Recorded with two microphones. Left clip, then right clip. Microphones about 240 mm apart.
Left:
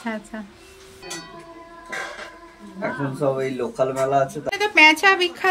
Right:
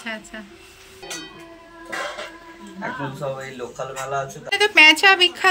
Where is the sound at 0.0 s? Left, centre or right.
Centre.